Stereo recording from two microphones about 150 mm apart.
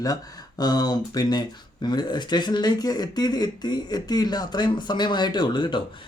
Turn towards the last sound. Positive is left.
turn(degrees=30)  # may be behind; listen again after turning